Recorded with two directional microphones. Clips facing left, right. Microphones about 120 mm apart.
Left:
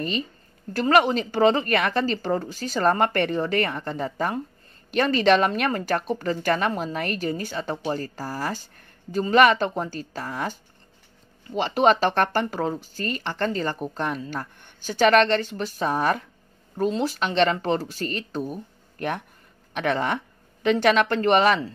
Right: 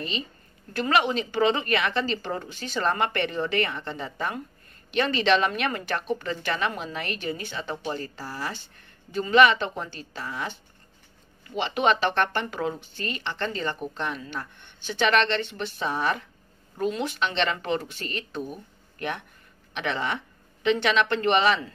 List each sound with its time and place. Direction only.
0.7 s speech: 40° left (ahead or behind)